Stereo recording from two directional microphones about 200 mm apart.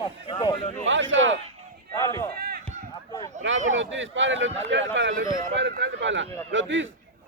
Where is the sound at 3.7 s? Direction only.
70° right (ahead or behind).